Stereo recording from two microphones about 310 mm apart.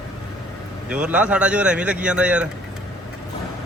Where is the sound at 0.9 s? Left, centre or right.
Centre.